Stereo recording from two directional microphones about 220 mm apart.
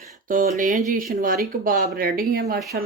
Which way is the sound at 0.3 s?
40° right (ahead or behind).